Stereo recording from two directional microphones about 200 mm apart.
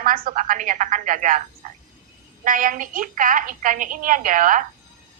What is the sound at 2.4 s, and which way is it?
A woman's voice, 45° right (ahead or behind).